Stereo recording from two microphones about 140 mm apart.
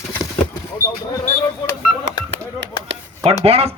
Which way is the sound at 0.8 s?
20° left (ahead or behind).